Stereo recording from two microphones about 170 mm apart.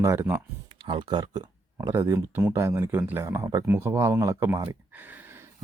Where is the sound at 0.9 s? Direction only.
25° right (ahead or behind).